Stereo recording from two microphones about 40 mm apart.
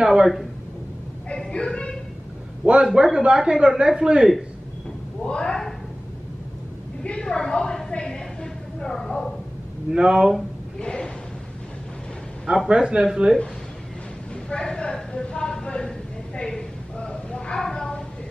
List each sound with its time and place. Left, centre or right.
0.0 s speech: centre
1.5 s a sound: left
2.6 s a man's voice: right; by 4.5 s centre
5.2 s a man's voice: centre
7.0 s a man's voice: left
9.8 s speech: right
10.8 s speech: left
12.6 s speech: right
14.5 s a man's voice: left
17.6 s a woman's voice: centre